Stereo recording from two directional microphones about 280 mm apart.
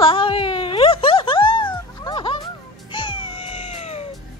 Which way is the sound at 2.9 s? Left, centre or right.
Centre.